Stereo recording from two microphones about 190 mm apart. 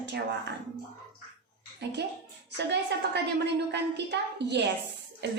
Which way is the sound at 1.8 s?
60° right (ahead or behind).